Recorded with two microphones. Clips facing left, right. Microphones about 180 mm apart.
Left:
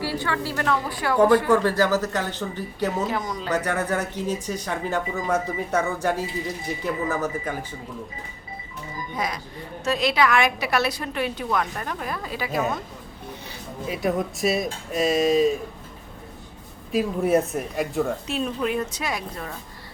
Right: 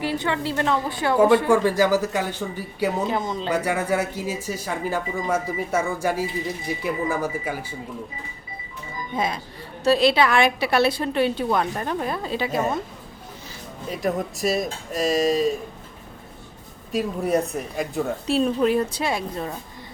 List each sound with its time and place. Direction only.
0.0 s a woman's voice: 20° right (ahead or behind)
1.5 s speech: 10° right (ahead or behind)
3.1 s a woman's voice: 25° right (ahead or behind)
3.5 s speech: 10° right (ahead or behind)
9.1 s a woman's voice: 25° right (ahead or behind)
13.8 s speech: centre (ahead or behind)
16.9 s speech: 5° left (ahead or behind)
18.3 s a woman's voice: 35° right (ahead or behind)